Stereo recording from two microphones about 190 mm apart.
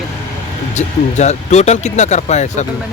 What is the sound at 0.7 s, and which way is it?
Speech, 35° left (ahead or behind).